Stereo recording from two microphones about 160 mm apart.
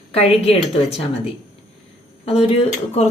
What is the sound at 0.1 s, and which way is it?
Speech, 40° left (ahead or behind).